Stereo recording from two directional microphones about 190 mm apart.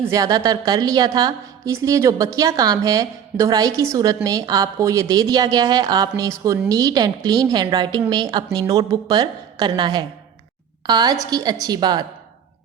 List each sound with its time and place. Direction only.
0.0 s a woman's voice: 20° right (ahead or behind)